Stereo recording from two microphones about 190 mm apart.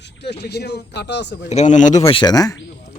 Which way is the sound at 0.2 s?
60° left (ahead or behind).